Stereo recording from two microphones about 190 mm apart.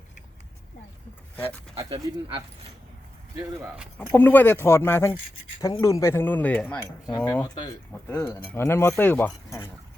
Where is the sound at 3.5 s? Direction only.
5° right (ahead or behind).